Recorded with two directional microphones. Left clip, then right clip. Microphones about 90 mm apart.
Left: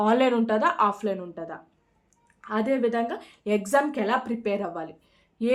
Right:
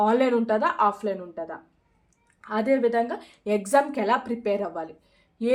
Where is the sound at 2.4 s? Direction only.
10° left (ahead or behind).